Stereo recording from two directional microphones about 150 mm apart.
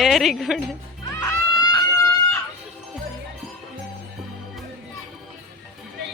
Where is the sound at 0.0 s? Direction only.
Centre (ahead or behind).